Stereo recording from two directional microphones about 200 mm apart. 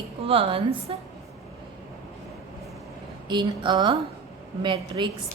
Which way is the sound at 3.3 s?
25° right (ahead or behind).